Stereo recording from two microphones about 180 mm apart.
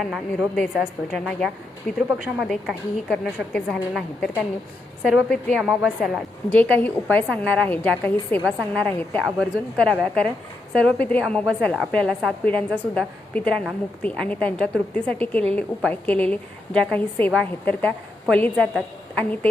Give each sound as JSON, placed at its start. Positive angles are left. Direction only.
{"t": 0.0, "sound": "a woman's voice", "side_deg": 0}
{"t": 6.5, "sound": "a woman's voice", "side_deg": 10}